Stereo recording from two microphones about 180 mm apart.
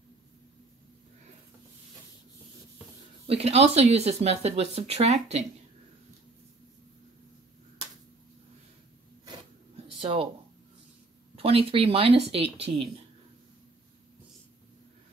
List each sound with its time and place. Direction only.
3.3 s speech: 35° right (ahead or behind)
9.9 s a sound: 30° right (ahead or behind)
11.3 s speech: 30° right (ahead or behind)